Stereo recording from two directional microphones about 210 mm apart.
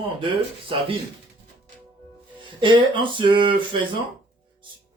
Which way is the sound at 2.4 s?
25° right (ahead or behind).